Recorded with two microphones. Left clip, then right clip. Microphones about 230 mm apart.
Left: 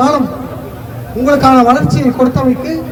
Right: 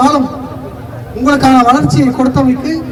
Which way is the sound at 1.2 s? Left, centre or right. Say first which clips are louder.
Even; right.